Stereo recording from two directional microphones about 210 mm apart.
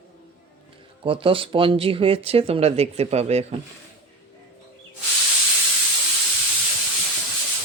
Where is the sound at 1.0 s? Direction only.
25° right (ahead or behind).